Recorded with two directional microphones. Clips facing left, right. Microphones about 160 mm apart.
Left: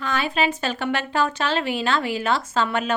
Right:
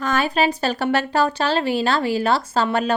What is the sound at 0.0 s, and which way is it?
A woman's voice, 45° right (ahead or behind).